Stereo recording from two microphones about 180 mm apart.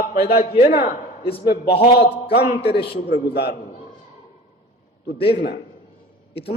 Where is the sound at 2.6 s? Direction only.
30° left (ahead or behind).